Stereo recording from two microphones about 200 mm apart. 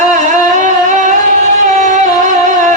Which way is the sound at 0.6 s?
40° right (ahead or behind).